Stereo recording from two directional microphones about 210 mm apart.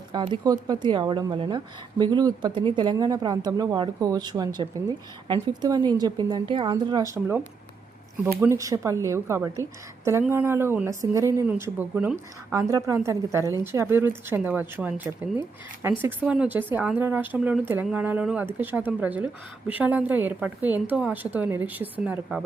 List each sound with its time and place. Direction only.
0.1 s a woman's voice: 20° right (ahead or behind); by 22.4 s 5° right (ahead or behind)